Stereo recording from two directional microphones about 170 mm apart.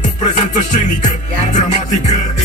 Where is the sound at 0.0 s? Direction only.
45° left (ahead or behind).